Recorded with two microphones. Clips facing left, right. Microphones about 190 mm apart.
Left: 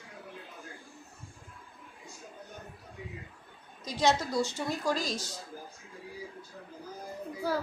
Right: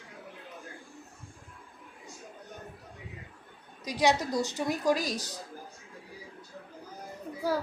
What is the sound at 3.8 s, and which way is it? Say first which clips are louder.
A woman's voice: right 1 dB; 15° right (ahead or behind).